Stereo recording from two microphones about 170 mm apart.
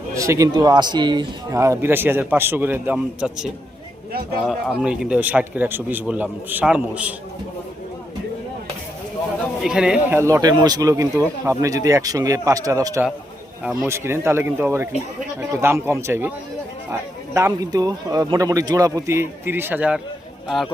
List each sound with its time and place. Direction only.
0.1 s a man's voice: 20° right (ahead or behind)
9.6 s a man's voice: 5° right (ahead or behind)
10.2 s a man's voice: 15° right (ahead or behind)